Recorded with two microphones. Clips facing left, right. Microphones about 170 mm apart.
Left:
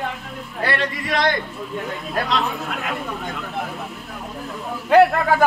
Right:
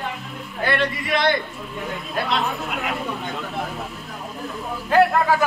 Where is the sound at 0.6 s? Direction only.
40° left (ahead or behind).